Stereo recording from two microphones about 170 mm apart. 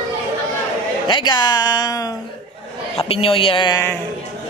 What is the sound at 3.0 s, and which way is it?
Speech, 35° left (ahead or behind).